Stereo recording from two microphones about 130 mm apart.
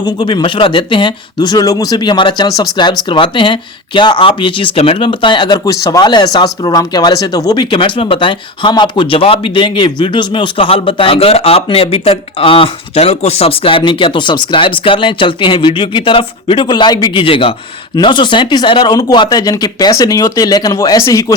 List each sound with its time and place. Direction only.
0.0 s speech: 35° left (ahead or behind)